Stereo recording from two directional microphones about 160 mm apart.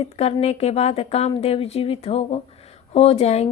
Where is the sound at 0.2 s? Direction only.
40° left (ahead or behind).